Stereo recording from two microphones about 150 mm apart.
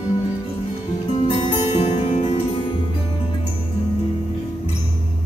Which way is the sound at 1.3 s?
45° left (ahead or behind).